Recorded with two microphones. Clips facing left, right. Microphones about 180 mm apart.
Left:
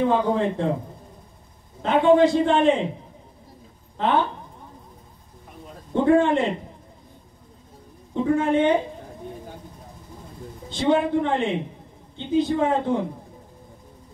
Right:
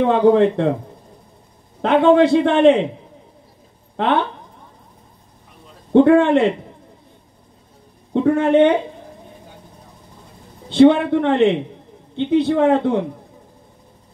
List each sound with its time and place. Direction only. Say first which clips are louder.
0.0 s a man's voice: right 8 dB; 70° right (ahead or behind)
1.8 s a man's voice: right 4 dB; 70° right (ahead or behind)
3.9 s speech: right 3 dB; 70° right (ahead or behind)
5.9 s a man's voice: right 7 dB; 70° right (ahead or behind)
8.1 s a man's voice: right 6 dB; 70° right (ahead or behind)
10.7 s a man's voice: right 9 dB; 65° right (ahead or behind)